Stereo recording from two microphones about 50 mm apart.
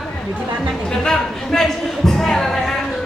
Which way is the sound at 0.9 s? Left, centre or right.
Centre.